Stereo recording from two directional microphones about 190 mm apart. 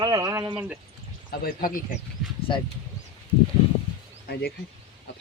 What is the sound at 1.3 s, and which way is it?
Speech, 50° left (ahead or behind).